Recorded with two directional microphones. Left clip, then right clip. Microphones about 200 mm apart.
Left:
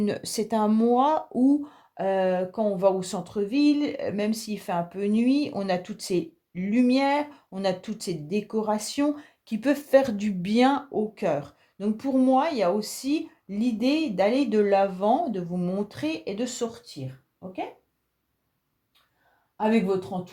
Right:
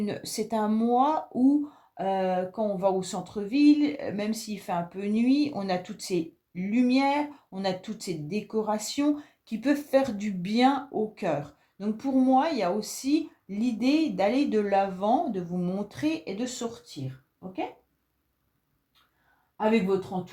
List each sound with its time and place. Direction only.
0.0 s speech: 40° left (ahead or behind)